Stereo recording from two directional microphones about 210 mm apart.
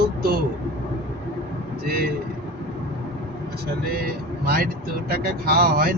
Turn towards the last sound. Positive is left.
turn(degrees=-45)  # may be behind; listen again after turning